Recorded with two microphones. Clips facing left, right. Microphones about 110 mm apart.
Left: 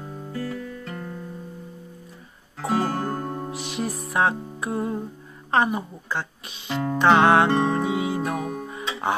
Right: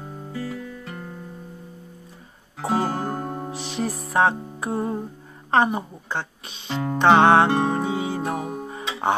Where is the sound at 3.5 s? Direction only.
30° right (ahead or behind).